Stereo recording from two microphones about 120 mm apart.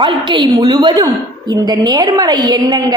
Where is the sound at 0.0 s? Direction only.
40° right (ahead or behind).